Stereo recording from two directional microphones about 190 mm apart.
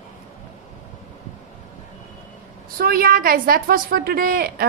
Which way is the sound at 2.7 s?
50° right (ahead or behind).